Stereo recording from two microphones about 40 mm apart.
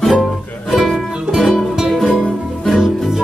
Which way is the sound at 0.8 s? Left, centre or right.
Centre.